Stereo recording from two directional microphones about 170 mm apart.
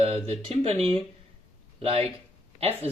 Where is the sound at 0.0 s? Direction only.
35° right (ahead or behind).